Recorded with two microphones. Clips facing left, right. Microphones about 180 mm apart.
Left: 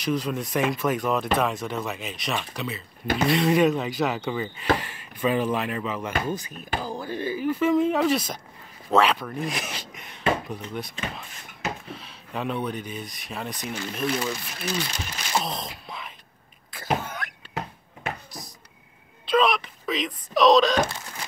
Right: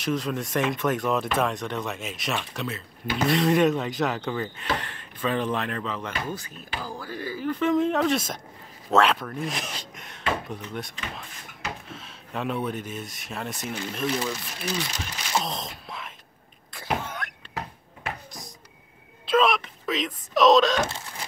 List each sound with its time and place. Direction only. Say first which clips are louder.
0.0 s speech: left 1 dB; centre (ahead or behind)
16.7 s cough: left 2 dB; centre (ahead or behind)
19.2 s speech: even; centre (ahead or behind)